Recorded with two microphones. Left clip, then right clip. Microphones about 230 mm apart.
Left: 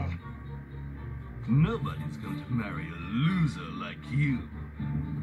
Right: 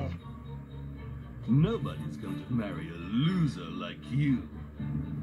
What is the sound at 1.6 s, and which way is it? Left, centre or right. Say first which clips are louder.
Speech: even; left.